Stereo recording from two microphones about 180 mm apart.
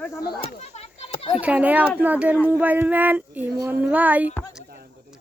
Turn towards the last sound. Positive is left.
turn(degrees=-10)  # may be behind; listen again after turning